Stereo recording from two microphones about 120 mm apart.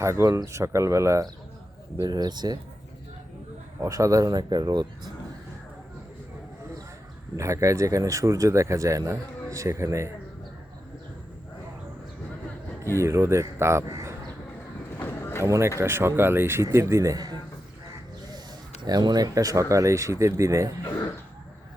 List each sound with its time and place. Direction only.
0.0 s speech: 25° right (ahead or behind)
3.8 s speech: 25° right (ahead or behind)
7.3 s speech: 25° right (ahead or behind)
13.0 s speech: 25° right (ahead or behind)
15.0 s a sound: 20° left (ahead or behind)
15.4 s speech: 25° right (ahead or behind)
18.8 s speech: 35° right (ahead or behind)